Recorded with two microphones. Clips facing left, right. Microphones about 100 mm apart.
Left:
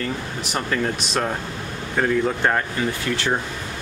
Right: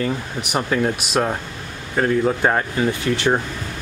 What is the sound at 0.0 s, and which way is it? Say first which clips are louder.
Speech: right 3 dB; 15° right (ahead or behind).